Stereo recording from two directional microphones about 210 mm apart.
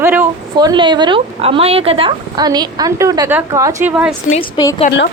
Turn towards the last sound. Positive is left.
turn(degrees=50)  # may be behind; listen again after turning